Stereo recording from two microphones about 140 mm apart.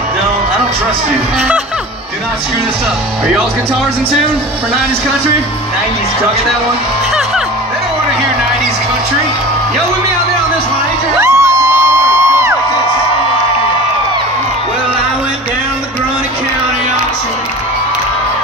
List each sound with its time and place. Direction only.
11.1 s music: 20° right (ahead or behind)